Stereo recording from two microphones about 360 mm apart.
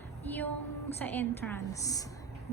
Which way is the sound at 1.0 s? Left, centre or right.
Centre.